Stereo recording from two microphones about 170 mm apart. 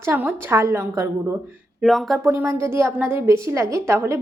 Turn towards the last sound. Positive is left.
turn(degrees=-15)  # may be behind; listen again after turning